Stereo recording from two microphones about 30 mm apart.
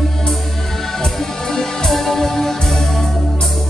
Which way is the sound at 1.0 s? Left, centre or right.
Centre.